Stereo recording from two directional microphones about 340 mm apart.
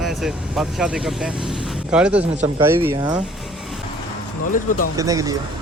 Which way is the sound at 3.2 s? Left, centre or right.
Centre.